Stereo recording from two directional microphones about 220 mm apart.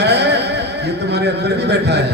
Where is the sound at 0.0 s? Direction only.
50° right (ahead or behind).